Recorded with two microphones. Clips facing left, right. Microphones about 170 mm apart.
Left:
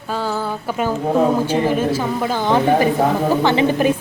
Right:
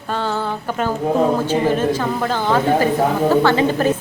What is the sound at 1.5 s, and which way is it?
A woman's voice, 10° left (ahead or behind).